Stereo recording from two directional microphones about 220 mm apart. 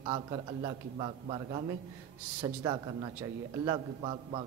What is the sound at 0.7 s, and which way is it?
A man's voice, 20° right (ahead or behind).